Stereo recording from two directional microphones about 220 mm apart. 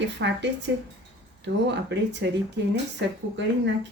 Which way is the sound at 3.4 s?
55° right (ahead or behind).